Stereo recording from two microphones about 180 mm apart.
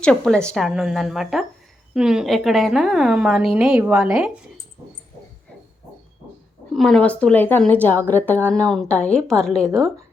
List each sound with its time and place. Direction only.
0.0 s a woman's voice: 5° left (ahead or behind)
6.7 s a woman's voice: 5° left (ahead or behind)